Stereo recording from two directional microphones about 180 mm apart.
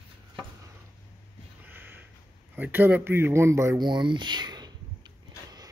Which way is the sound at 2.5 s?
10° right (ahead or behind).